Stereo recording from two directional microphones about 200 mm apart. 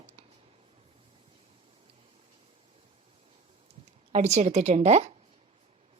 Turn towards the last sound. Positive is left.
turn(degrees=-35)  # may be behind; listen again after turning